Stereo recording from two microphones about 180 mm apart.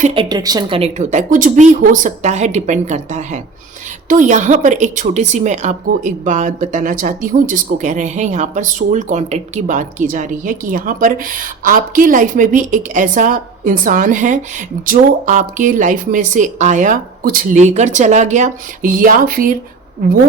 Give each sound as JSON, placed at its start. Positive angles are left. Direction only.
{"t": 0.0, "sound": "a woman's voice", "side_deg": -30}